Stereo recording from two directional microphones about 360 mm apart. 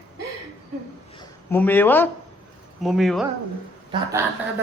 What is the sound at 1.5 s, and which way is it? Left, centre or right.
Speech, centre.